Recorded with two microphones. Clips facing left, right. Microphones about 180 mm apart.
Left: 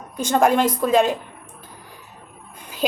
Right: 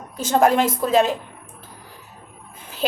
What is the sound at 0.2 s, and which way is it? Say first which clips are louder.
Speech: even; 5° right (ahead or behind).